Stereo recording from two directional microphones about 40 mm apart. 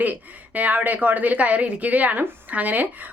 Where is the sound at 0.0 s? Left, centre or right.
Right.